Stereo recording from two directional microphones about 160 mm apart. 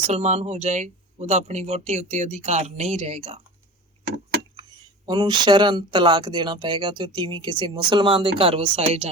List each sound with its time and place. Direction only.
0.1 s speech: 45° right (ahead or behind)
5.0 s speech: 30° right (ahead or behind)